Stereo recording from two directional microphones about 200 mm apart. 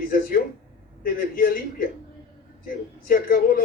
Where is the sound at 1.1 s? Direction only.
45° left (ahead or behind).